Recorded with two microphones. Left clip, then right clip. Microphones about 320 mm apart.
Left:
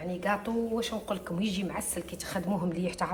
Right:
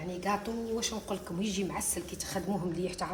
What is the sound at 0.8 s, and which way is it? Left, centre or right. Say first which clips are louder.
A woman's voice: left 3 dB; centre.